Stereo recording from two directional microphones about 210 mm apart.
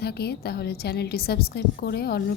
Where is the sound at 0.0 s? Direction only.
50° left (ahead or behind).